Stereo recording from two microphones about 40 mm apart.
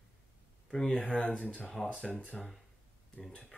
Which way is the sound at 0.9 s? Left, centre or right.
Left.